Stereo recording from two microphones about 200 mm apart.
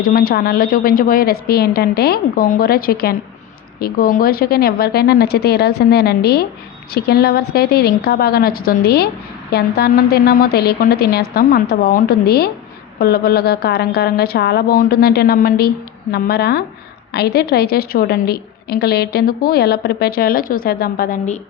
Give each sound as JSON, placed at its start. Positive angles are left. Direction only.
{"t": 0.0, "sound": "a woman's voice", "side_deg": 45}